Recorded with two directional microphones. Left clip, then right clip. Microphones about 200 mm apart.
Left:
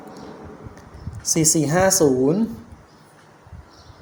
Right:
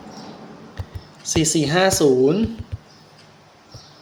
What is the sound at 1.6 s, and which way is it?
Speech, 10° left (ahead or behind).